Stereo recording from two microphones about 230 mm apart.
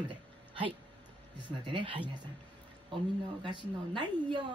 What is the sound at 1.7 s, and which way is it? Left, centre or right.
Speech, right.